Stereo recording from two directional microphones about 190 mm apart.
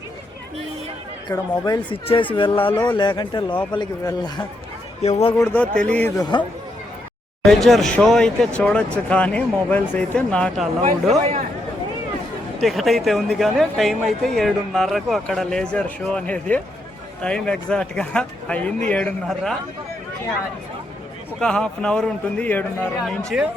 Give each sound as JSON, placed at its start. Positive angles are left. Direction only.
{"t": 1.3, "sound": "speech", "side_deg": 20}
{"t": 5.0, "sound": "speech", "side_deg": 35}
{"t": 5.4, "sound": "speech", "side_deg": 10}
{"t": 7.4, "sound": "speech", "side_deg": 0}
{"t": 12.5, "sound": "speech", "side_deg": 0}
{"t": 21.3, "sound": "speech", "side_deg": 5}
{"t": 23.0, "sound": "speech", "side_deg": -5}